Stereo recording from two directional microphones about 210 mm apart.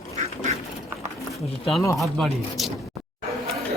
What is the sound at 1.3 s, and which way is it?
Speech, centre (ahead or behind).